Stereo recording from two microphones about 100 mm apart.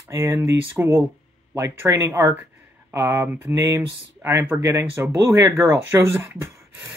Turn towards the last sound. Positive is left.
turn(degrees=-25)  # may be behind; listen again after turning